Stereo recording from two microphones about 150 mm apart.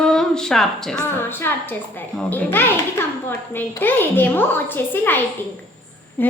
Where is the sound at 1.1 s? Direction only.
15° left (ahead or behind).